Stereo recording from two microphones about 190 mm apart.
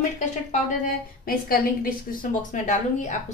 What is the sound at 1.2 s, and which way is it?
A woman's voice, 50° left (ahead or behind).